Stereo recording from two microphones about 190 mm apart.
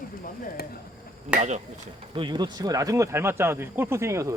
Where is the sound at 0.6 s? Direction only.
55° left (ahead or behind).